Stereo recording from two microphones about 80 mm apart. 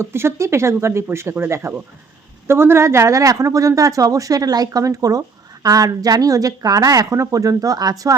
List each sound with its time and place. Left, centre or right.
0.0 s speech: right